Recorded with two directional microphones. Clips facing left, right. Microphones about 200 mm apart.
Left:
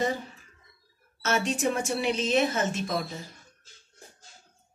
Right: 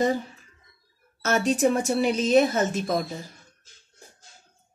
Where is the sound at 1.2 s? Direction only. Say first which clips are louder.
Right 5 dB; 40° right (ahead or behind).